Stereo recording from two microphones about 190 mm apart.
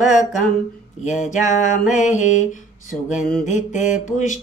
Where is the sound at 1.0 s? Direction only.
40° left (ahead or behind).